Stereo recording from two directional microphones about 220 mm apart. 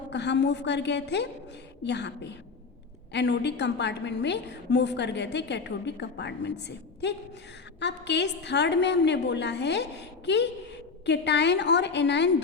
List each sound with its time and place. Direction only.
0.1 s a woman's voice: 50° left (ahead or behind)